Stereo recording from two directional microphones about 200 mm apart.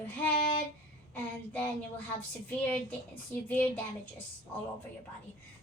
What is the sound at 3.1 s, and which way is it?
Speech, 10° left (ahead or behind).